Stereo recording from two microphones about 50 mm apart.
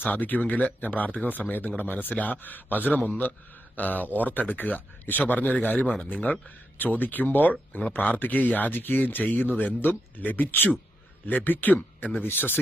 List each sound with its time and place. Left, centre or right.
0.0 s speech: left